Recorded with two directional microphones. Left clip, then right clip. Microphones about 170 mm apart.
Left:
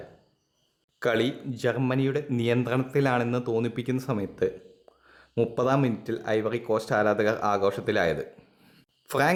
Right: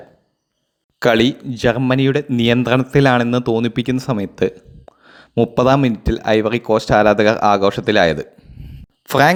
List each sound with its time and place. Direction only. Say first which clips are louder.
0.9 s speech: right 11 dB; 40° right (ahead or behind)